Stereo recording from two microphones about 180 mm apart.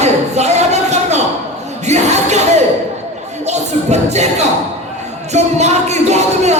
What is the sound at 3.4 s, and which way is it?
Music, 40° right (ahead or behind).